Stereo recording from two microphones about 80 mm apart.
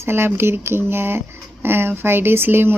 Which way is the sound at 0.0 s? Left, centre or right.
Right.